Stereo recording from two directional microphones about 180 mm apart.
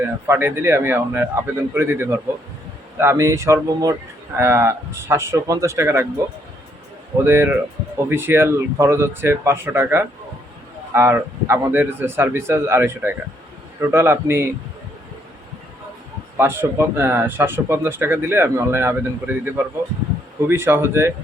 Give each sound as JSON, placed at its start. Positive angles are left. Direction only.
{"t": 0.0, "sound": "speech", "side_deg": -10}
{"t": 7.3, "sound": "speech", "side_deg": -10}
{"t": 16.4, "sound": "speech", "side_deg": -15}